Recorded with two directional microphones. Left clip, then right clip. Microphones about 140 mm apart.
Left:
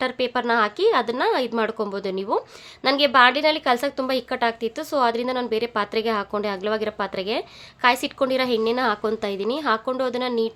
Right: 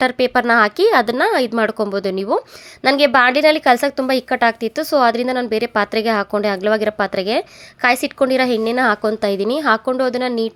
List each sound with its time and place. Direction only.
0.0 s a woman's voice: 45° right (ahead or behind)